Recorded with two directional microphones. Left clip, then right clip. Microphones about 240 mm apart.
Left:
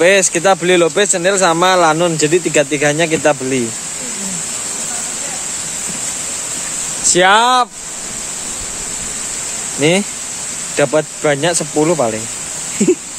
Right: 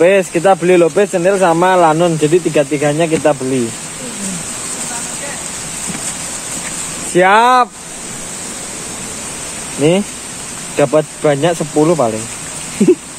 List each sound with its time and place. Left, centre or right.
0.0 s speech: centre
7.2 s speech: centre
9.8 s speech: centre